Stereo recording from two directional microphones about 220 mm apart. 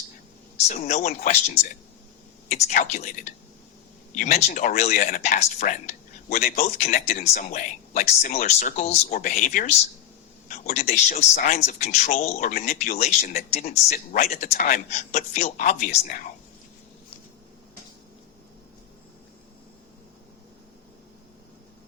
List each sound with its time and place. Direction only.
0.5 s speech: 30° left (ahead or behind)